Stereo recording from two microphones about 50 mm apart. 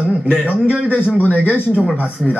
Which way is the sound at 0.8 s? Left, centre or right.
Left.